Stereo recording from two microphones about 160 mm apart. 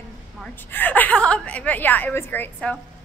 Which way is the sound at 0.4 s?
10° left (ahead or behind).